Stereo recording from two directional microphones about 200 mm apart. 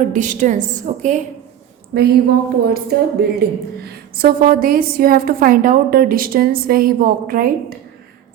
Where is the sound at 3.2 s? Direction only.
50° right (ahead or behind).